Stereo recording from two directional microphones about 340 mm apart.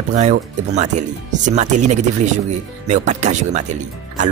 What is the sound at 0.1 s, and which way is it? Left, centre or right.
Speech, right.